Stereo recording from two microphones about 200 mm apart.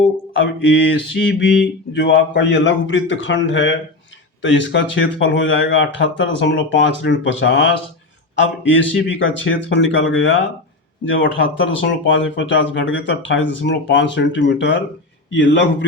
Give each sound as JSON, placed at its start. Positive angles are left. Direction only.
{"t": 0.3, "sound": "speech", "side_deg": 65}